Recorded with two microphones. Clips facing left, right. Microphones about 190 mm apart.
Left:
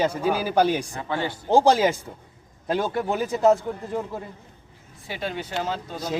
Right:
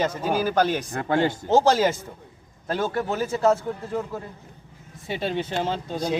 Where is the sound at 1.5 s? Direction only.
15° left (ahead or behind).